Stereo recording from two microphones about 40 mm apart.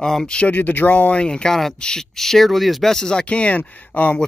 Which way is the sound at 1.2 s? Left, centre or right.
Centre.